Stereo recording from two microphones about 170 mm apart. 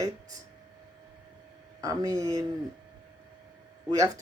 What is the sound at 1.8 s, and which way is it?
Speech, 20° right (ahead or behind).